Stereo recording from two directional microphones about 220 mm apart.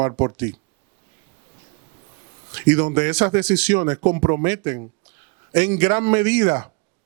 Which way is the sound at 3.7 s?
20° right (ahead or behind).